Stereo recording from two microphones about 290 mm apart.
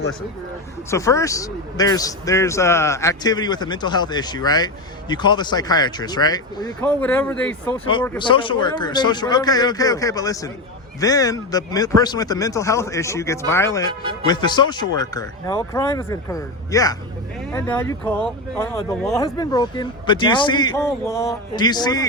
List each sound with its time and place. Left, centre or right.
0.9 s a man's voice: centre
14.0 s speech: centre
14.3 s a man's voice: centre